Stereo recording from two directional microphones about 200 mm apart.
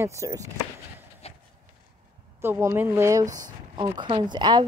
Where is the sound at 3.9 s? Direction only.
25° right (ahead or behind).